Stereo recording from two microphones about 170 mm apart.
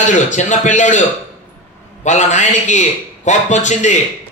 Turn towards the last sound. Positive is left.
turn(degrees=45)  # may be behind; listen again after turning